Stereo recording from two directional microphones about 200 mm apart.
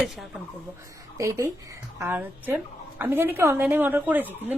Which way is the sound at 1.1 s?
15° right (ahead or behind).